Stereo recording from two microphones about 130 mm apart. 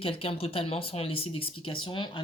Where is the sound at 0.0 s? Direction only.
45° left (ahead or behind).